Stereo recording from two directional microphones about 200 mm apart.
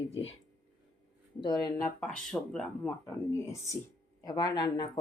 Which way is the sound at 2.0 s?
5° left (ahead or behind).